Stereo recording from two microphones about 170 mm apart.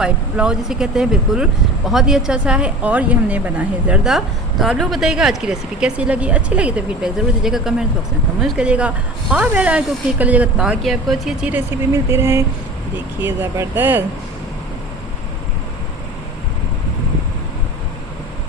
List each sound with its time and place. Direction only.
0.0 s speech: 5° right (ahead or behind)